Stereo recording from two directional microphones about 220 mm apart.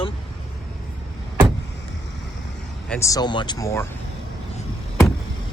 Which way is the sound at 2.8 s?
5° left (ahead or behind).